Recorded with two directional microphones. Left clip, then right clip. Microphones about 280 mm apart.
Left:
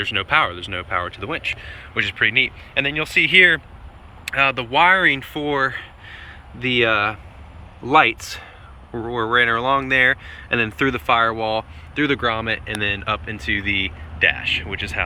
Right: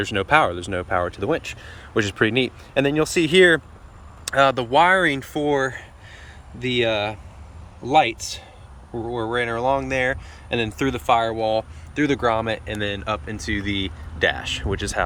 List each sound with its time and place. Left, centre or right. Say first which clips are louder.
0.0 s speech: even; right